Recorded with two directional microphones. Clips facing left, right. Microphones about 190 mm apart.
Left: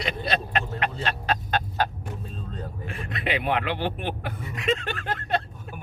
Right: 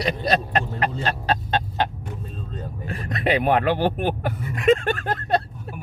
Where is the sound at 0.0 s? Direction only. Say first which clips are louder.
Right 5 dB; 40° right (ahead or behind).